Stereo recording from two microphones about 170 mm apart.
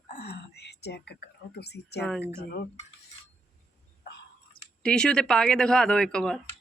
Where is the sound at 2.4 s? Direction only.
65° left (ahead or behind).